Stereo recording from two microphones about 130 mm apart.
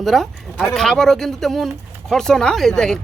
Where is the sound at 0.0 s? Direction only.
Centre (ahead or behind).